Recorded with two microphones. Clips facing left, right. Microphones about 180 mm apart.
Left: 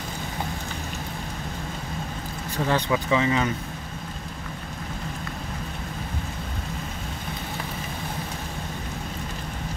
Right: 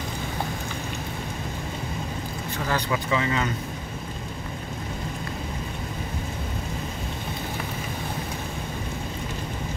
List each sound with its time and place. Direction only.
2.6 s speech: 20° left (ahead or behind)